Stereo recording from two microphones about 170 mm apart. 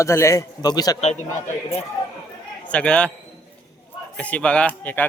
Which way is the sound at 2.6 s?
5° left (ahead or behind).